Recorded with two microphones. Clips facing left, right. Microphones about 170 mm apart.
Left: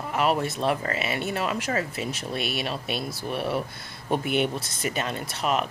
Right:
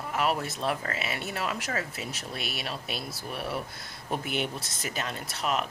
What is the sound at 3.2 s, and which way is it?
Speech, 25° left (ahead or behind).